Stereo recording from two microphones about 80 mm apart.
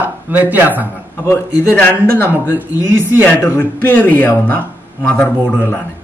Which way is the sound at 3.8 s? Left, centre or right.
Left.